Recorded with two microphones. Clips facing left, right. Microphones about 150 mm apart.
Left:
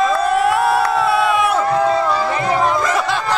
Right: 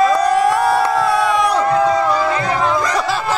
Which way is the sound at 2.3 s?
10° left (ahead or behind).